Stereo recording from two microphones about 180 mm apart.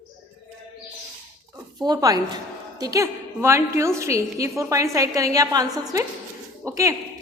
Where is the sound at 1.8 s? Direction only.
20° right (ahead or behind).